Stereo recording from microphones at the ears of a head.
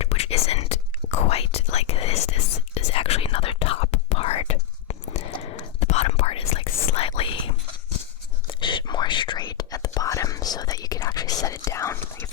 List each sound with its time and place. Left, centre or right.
0.0 s whispering: left